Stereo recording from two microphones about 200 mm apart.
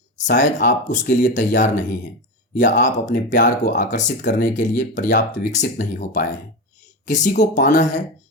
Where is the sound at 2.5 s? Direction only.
40° left (ahead or behind).